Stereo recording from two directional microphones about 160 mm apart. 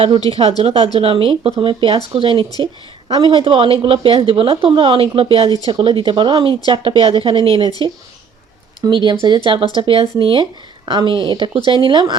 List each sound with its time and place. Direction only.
0.3 s a woman's voice: 30° right (ahead or behind)
8.8 s speech: 30° right (ahead or behind)